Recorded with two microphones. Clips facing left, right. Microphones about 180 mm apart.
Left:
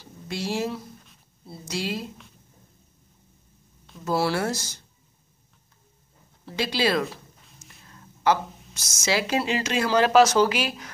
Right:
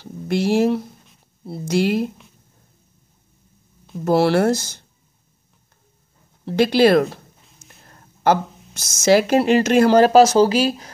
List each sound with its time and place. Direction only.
0.0 s speech: 60° right (ahead or behind)
4.0 s speech: 65° right (ahead or behind)
6.4 s a woman's voice: 55° right (ahead or behind); by 10.9 s 35° right (ahead or behind)